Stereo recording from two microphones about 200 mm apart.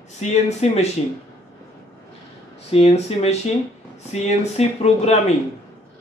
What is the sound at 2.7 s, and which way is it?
Speech, 30° left (ahead or behind).